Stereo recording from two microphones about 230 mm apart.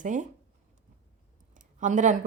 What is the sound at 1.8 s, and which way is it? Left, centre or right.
Speech, right.